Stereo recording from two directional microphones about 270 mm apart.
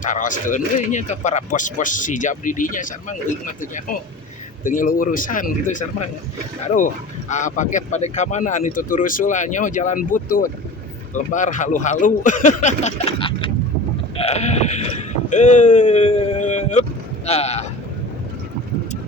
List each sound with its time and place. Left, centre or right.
0.0 s speech: left
14.2 s sheep: left
15.3 s speech: left